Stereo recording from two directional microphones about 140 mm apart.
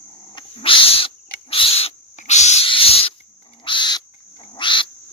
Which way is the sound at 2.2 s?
55° left (ahead or behind).